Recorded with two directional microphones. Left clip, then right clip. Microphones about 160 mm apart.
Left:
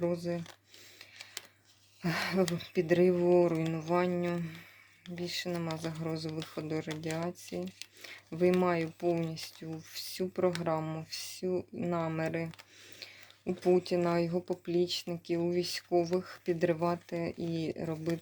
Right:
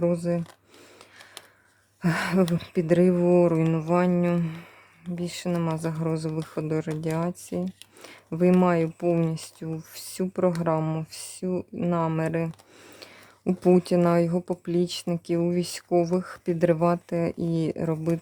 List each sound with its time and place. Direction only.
0.0 s speech: 45° right (ahead or behind)
2.0 s speech: 40° right (ahead or behind)
13.4 s speech: 60° right (ahead or behind); by 18.1 s 45° right (ahead or behind)